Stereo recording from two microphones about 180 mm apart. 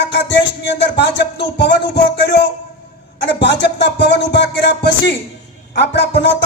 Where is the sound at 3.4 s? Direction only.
70° left (ahead or behind).